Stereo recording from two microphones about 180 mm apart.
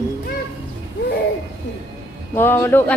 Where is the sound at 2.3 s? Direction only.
10° left (ahead or behind).